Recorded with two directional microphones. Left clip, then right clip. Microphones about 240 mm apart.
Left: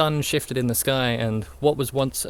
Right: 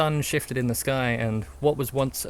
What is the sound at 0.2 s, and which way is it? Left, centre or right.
Speech, centre.